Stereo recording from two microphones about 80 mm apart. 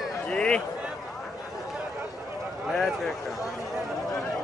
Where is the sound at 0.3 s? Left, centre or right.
Centre.